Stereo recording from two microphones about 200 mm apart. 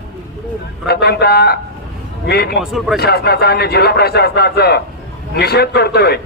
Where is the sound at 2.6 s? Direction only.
Centre (ahead or behind).